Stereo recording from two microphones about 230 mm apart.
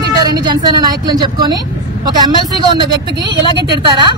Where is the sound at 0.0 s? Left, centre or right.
Centre.